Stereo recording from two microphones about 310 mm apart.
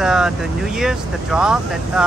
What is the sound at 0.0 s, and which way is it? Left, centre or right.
Speech, centre.